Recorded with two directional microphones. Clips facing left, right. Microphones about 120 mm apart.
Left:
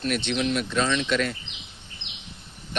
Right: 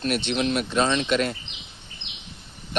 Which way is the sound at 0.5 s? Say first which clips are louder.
Right 2 dB; 25° right (ahead or behind).